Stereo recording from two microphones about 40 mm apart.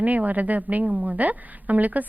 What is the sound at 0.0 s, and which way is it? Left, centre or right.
A woman's voice, right.